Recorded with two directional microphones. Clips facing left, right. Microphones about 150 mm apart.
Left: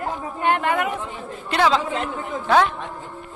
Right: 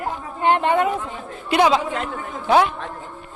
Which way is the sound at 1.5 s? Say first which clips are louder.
Right 2 dB; 15° right (ahead or behind).